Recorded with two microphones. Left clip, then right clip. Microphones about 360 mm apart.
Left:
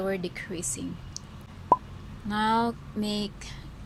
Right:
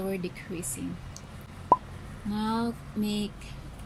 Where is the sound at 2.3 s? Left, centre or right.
Centre.